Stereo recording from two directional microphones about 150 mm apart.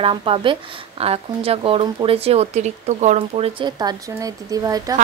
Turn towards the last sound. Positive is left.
turn(degrees=-25)  # may be behind; listen again after turning